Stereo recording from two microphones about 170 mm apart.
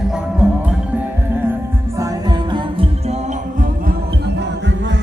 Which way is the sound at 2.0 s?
25° right (ahead or behind).